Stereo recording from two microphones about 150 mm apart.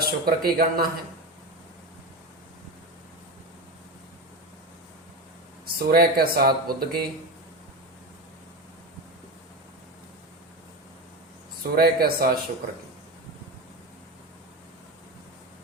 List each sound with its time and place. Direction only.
0.0 s speech: 90° right
5.6 s speech: 90° right
11.7 s speech: 90° right